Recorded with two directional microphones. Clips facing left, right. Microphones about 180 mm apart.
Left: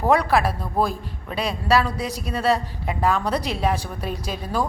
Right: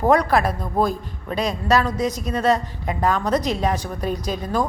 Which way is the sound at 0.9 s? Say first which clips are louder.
Right 4 dB; 40° right (ahead or behind).